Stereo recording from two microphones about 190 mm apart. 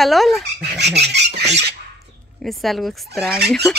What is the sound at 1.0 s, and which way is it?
Speech, 60° right (ahead or behind).